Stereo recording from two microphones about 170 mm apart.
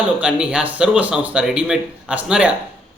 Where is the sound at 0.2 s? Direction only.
5° right (ahead or behind).